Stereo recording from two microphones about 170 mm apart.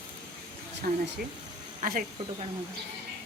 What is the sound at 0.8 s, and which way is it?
Speech, 60° right (ahead or behind).